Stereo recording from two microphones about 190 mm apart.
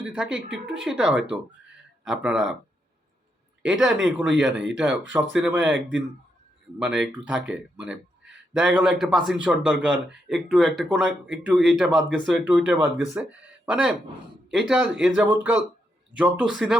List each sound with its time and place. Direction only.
0.0 s speech: 5° right (ahead or behind)
0.3 s a woman's voice: 70° right (ahead or behind)
0.9 s speech: 5° right (ahead or behind)
3.7 s speech: centre (ahead or behind)
6.7 s speech: 5° right (ahead or behind)